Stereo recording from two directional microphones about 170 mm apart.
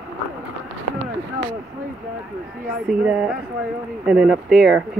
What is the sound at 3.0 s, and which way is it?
Speech, 5° right (ahead or behind).